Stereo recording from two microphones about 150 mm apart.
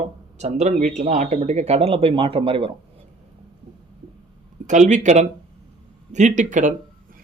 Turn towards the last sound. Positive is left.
turn(degrees=-55)  # may be behind; listen again after turning